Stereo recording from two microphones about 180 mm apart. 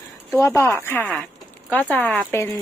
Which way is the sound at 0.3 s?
15° left (ahead or behind).